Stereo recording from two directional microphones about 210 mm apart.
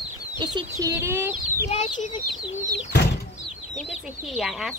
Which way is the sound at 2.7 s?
50° left (ahead or behind).